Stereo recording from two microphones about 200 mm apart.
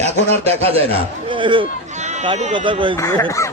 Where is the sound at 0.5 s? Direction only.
30° right (ahead or behind).